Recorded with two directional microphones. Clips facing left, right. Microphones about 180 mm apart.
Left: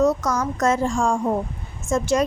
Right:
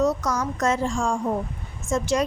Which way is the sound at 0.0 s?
50° left (ahead or behind).